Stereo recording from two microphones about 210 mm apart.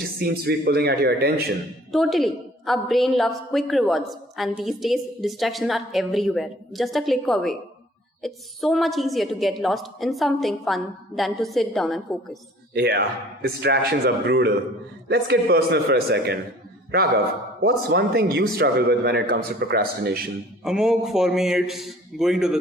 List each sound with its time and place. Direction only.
0.2 s a man's voice: 45° right (ahead or behind)
1.9 s a woman's voice: centre (ahead or behind)
12.7 s a man's voice: 50° right (ahead or behind)
17.6 s a man's voice: 50° right (ahead or behind)
20.7 s a woman's voice: centre (ahead or behind)